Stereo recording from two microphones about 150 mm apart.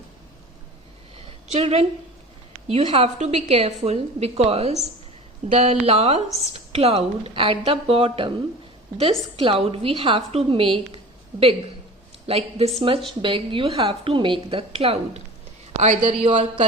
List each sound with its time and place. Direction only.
1.5 s a woman's voice: 45° right (ahead or behind)